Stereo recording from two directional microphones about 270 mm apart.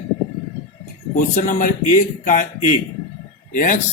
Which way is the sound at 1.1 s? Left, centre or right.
Left.